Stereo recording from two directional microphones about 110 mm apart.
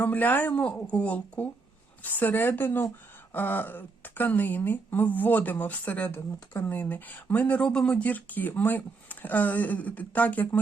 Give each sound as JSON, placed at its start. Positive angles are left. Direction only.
{"t": 0.0, "sound": "speech", "side_deg": 15}